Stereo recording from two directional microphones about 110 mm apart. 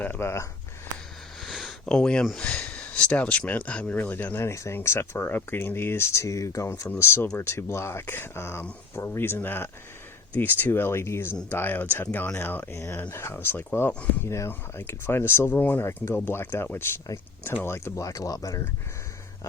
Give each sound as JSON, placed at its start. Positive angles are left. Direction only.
{"t": 0.0, "sound": "speech", "side_deg": 20}
{"t": 1.4, "sound": "speech", "side_deg": 0}